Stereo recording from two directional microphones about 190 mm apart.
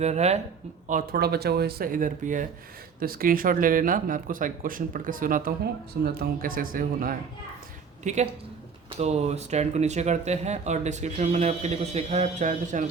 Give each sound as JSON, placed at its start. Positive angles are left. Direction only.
{"t": 0.0, "sound": "speech", "side_deg": -35}
{"t": 0.9, "sound": "speech", "side_deg": -50}
{"t": 8.0, "sound": "speech", "side_deg": -40}